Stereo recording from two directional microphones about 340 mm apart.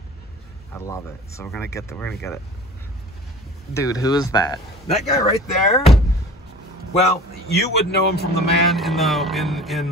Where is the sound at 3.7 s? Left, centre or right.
Centre.